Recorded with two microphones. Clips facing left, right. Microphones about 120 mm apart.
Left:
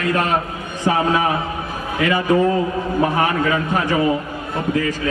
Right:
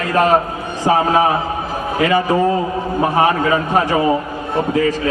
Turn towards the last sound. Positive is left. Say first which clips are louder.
# right 4 dB
turn(degrees=-30)  # may be behind; listen again after turning